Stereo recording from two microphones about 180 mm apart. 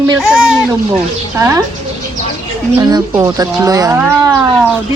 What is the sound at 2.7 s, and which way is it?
Speech, 20° right (ahead or behind).